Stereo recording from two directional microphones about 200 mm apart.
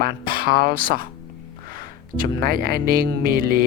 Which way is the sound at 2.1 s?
45° right (ahead or behind).